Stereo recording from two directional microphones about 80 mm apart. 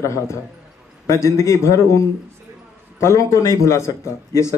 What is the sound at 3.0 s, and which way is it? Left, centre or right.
A man's voice, left.